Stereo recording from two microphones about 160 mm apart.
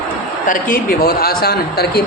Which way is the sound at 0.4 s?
60° left (ahead or behind).